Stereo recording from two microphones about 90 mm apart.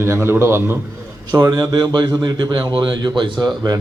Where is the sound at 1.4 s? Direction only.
50° right (ahead or behind).